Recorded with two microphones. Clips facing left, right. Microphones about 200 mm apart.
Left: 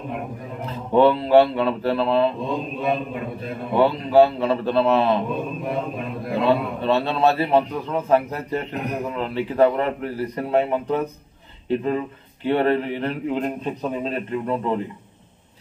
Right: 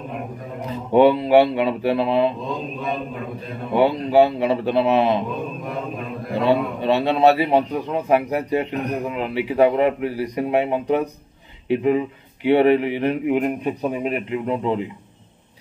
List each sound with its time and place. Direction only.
0.7 s a man's voice: 15° right (ahead or behind)
3.7 s a man's voice: 15° right (ahead or behind)
6.4 s a man's voice: 15° right (ahead or behind)